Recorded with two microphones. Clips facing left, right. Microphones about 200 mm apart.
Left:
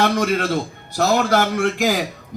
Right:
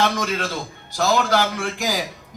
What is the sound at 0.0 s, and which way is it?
A man's voice, 60° left (ahead or behind).